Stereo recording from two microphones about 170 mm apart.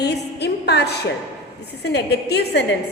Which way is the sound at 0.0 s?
75° left (ahead or behind).